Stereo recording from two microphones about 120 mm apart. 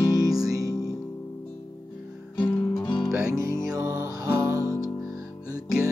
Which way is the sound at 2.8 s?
40° left (ahead or behind).